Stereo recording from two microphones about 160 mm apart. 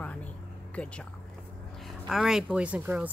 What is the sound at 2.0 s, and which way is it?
Speech, centre (ahead or behind).